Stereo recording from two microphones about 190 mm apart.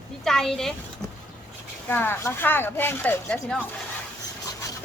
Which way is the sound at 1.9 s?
10° left (ahead or behind).